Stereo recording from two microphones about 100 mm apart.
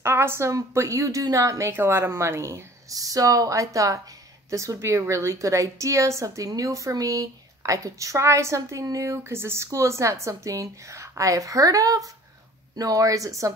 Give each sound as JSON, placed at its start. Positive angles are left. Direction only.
{"t": 0.0, "sound": "a woman's voice", "side_deg": -25}